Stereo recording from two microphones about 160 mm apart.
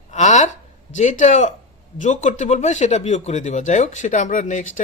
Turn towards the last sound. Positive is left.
turn(degrees=55)  # may be behind; listen again after turning